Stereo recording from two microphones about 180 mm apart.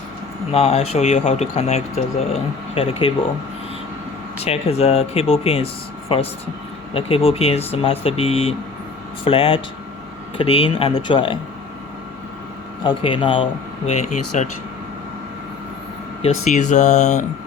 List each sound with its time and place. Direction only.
0.5 s speech: 35° left (ahead or behind)
4.4 s speech: 35° left (ahead or behind)
12.8 s speech: 30° left (ahead or behind)
14.3 s speech: 40° left (ahead or behind)
16.2 s speech: 40° left (ahead or behind)